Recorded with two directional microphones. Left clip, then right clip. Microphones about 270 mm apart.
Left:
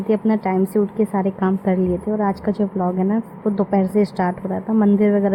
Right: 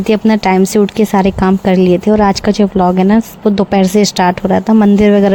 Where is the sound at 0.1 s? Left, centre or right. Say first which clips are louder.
Right 9 dB; right.